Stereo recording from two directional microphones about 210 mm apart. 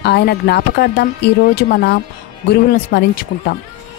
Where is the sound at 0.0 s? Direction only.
50° left (ahead or behind).